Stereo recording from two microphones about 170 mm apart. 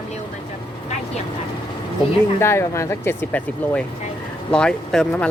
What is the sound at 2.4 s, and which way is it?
Speech, 15° left (ahead or behind).